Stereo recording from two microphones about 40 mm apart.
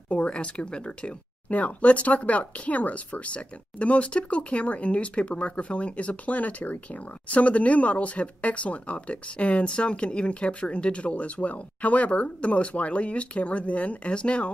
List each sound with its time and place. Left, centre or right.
0.1 s speech: left
1.5 s speech: left